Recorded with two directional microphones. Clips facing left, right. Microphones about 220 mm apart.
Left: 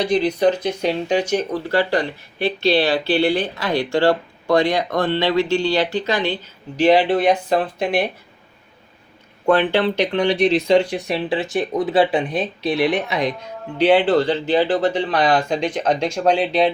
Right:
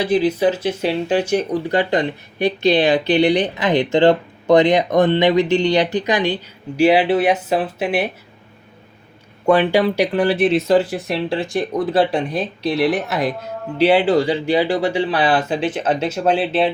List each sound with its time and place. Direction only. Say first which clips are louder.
0.0 s speech: right 1 dB; 5° right (ahead or behind)
9.5 s speech: right 2 dB; 10° right (ahead or behind)